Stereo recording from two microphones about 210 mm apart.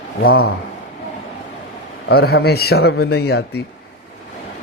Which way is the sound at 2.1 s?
50° left (ahead or behind).